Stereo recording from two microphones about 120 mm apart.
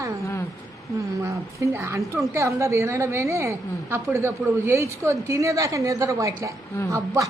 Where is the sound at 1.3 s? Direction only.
25° right (ahead or behind).